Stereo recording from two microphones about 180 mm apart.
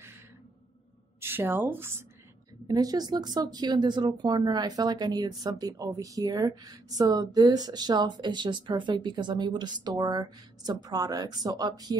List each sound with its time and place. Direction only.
1.2 s speech: 10° right (ahead or behind)